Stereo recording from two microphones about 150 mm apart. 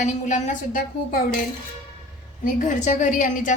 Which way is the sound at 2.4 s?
55° left (ahead or behind).